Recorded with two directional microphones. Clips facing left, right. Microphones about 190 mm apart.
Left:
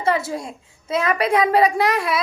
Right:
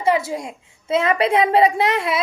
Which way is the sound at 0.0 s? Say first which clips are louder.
Right 2 dB; 15° right (ahead or behind).